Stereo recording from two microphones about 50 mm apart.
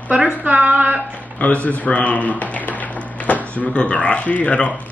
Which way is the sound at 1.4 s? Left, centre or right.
Left.